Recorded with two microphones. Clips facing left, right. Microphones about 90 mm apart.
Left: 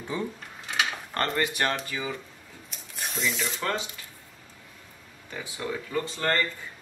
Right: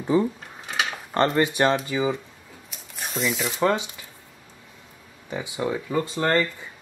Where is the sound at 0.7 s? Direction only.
20° right (ahead or behind).